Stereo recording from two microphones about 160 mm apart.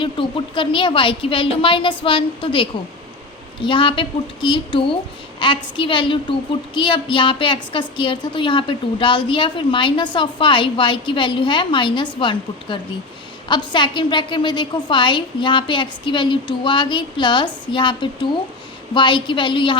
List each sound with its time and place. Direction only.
0.0 s a woman's voice: 30° left (ahead or behind)